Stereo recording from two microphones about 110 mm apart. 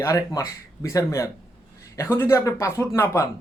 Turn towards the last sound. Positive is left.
turn(degrees=25)  # may be behind; listen again after turning